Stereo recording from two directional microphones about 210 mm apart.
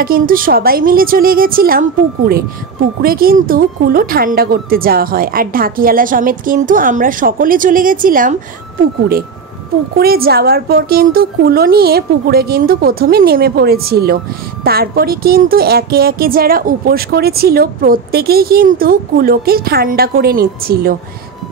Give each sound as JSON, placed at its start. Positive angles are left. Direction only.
{"t": 0.0, "sound": "a woman's voice", "side_deg": -45}
{"t": 9.9, "sound": "a woman's voice", "side_deg": -45}